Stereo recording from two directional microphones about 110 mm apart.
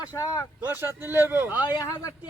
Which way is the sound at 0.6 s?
20° right (ahead or behind).